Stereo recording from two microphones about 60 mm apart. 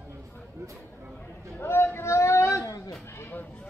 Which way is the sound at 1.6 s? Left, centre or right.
Left.